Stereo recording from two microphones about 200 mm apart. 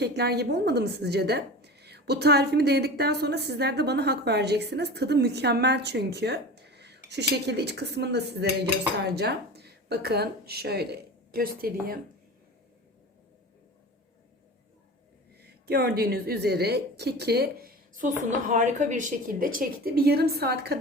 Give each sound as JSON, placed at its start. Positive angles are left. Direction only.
{"t": 0.0, "sound": "a woman's voice", "side_deg": -55}
{"t": 15.6, "sound": "a woman's voice", "side_deg": -50}